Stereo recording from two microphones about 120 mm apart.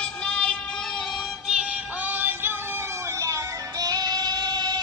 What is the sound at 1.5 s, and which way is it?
Synthetic singing, 15° right (ahead or behind).